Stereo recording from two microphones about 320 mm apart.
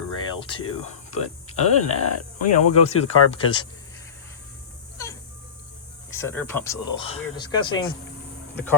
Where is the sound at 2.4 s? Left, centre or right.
Left.